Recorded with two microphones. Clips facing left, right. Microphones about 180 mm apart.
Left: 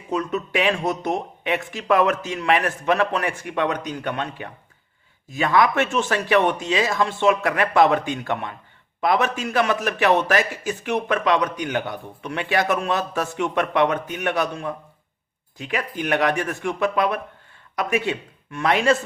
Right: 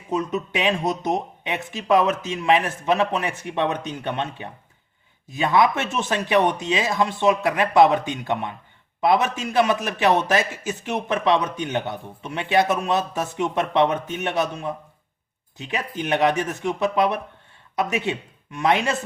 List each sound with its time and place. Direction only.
0.1 s speech: 20° right (ahead or behind)